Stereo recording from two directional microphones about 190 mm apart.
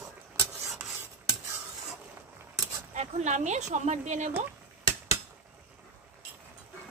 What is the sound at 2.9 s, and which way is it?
Speech, 40° right (ahead or behind).